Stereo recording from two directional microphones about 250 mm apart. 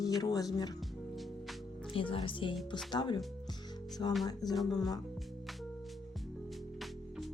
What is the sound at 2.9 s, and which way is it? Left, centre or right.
Music, centre.